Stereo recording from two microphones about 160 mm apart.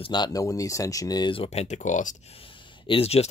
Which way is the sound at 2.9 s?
40° left (ahead or behind).